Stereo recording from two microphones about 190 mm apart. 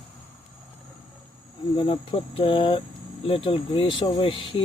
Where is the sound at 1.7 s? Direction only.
25° left (ahead or behind).